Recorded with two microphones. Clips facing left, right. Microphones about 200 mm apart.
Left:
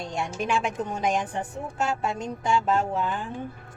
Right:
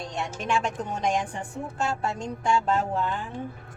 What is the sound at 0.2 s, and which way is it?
A woman's voice, 10° left (ahead or behind).